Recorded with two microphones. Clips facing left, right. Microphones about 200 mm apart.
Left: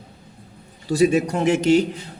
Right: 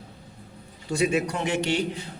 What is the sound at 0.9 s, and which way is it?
Speech, 40° left (ahead or behind).